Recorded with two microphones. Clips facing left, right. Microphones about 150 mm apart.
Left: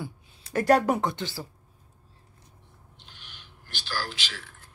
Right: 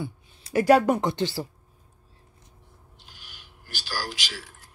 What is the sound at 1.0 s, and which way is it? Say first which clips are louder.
Speech: right 4 dB; 30° right (ahead or behind).